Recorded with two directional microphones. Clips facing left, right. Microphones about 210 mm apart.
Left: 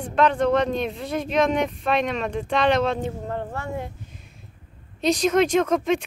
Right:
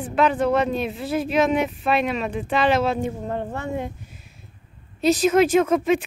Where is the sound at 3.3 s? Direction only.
20° right (ahead or behind).